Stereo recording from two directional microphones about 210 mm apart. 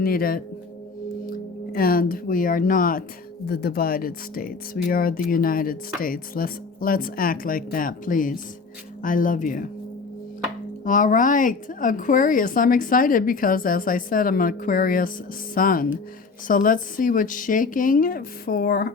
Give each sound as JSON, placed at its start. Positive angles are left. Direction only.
{"t": 0.0, "sound": "speech", "side_deg": 45}
{"t": 10.8, "sound": "speech", "side_deg": 40}